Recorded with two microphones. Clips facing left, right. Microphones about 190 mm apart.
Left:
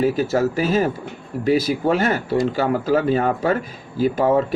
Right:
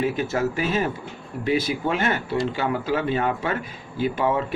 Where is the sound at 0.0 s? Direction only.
40° left (ahead or behind).